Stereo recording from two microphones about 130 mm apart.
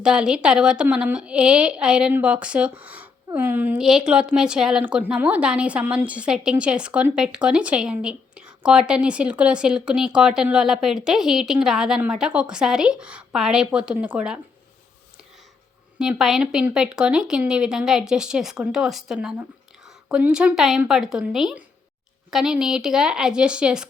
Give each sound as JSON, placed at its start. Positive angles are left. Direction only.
{"t": 0.0, "sound": "speech", "side_deg": -5}
{"t": 3.8, "sound": "speech", "side_deg": -5}
{"t": 16.0, "sound": "speech", "side_deg": -5}